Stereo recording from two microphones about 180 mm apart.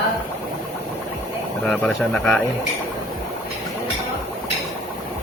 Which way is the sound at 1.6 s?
5° left (ahead or behind).